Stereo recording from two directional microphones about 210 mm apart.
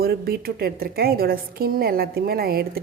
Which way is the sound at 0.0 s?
45° right (ahead or behind).